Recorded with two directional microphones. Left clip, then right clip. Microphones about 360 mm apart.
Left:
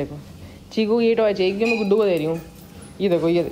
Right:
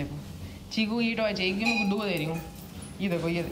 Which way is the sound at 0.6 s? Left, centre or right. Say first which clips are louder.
Left 11 dB; centre.